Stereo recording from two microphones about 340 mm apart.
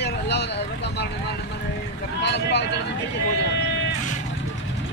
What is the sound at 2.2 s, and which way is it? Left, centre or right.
Boat, left.